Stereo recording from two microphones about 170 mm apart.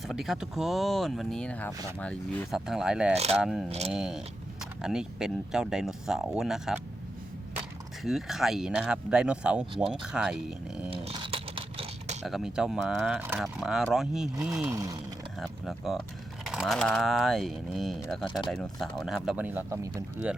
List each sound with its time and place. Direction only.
0.1 s speech: centre (ahead or behind)
3.7 s speech: 40° right (ahead or behind)
3.9 s speech: 5° right (ahead or behind)
8.0 s speech: centre (ahead or behind)
10.8 s a sound: 30° right (ahead or behind)
12.2 s speech: centre (ahead or behind)
14.7 s a sound: 20° right (ahead or behind)
15.4 s speech: centre (ahead or behind)